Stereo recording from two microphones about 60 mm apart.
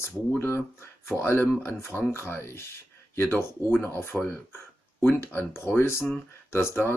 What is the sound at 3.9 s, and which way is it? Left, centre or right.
Speech, left.